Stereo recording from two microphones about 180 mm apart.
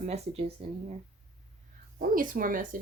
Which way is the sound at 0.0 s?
35° right (ahead or behind).